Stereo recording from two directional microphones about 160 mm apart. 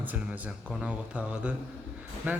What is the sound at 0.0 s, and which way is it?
A man's voice, 10° right (ahead or behind).